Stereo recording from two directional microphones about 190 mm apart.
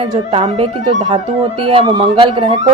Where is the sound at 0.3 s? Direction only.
30° right (ahead or behind).